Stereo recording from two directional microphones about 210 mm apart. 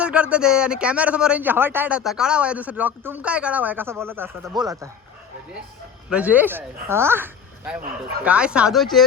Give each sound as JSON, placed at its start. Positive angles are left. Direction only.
{"t": 0.0, "sound": "speech", "side_deg": -5}
{"t": 6.1, "sound": "speech", "side_deg": -5}